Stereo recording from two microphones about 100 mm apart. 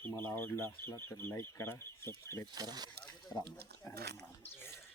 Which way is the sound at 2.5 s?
40° right (ahead or behind).